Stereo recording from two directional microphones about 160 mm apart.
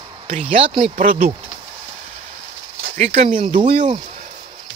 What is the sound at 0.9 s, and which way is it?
Speech, 60° right (ahead or behind).